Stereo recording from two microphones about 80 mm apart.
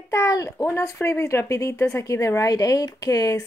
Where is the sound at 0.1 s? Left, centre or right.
Left.